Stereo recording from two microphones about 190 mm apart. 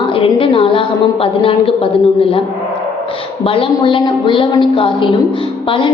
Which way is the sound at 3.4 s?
30° left (ahead or behind).